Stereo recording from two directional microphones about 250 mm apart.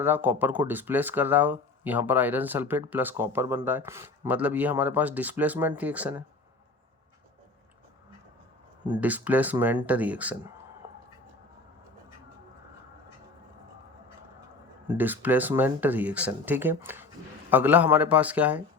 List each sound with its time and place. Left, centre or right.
0.0 s speech: centre
9.0 s speech: centre
10.8 s a sound: centre
14.8 s speech: centre